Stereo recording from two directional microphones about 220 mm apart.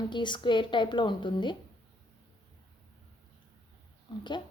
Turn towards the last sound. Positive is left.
turn(degrees=20)  # may be behind; listen again after turning